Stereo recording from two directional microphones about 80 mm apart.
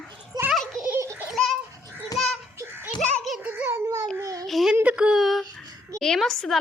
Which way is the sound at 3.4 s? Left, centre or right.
Right.